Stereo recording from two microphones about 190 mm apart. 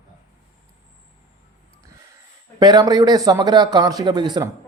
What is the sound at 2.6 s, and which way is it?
Speech, 20° right (ahead or behind).